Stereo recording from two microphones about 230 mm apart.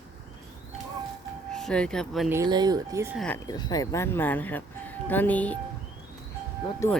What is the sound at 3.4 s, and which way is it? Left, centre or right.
Speech, centre.